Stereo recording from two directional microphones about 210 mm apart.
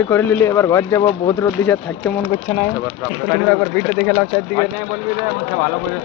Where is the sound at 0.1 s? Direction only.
10° left (ahead or behind).